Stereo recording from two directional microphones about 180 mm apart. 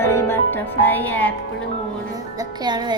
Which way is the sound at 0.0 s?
15° left (ahead or behind).